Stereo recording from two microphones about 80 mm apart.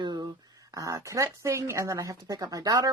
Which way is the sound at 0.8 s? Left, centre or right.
Right.